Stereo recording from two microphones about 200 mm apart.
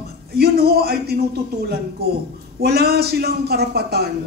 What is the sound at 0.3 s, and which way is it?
Speech, 55° right (ahead or behind).